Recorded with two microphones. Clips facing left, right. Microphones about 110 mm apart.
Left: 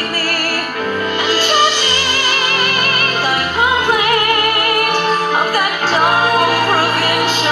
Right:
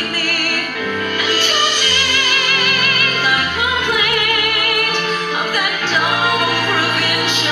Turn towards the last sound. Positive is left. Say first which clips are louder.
# left 4 dB
turn(degrees=40)  # may be behind; listen again after turning